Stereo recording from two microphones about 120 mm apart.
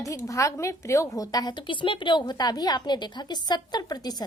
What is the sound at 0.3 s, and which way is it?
A woman's voice, 25° left (ahead or behind).